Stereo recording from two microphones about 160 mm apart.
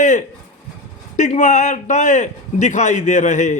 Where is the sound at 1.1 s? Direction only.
50° left (ahead or behind).